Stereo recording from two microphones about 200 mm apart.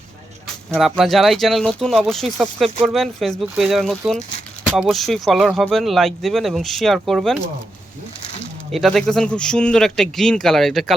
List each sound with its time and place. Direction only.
0.7 s speech: centre (ahead or behind)
8.2 s a sound: 35° left (ahead or behind)
8.7 s speech: centre (ahead or behind)